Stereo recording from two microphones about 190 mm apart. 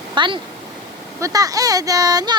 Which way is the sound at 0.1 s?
25° right (ahead or behind).